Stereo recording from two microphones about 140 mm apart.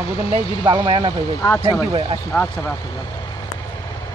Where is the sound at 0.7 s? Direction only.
35° right (ahead or behind).